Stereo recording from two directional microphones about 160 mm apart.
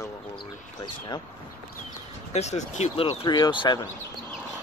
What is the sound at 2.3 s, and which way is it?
Speech, 45° left (ahead or behind).